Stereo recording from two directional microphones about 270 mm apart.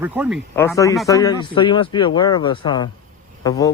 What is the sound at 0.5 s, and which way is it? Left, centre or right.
Speech, centre.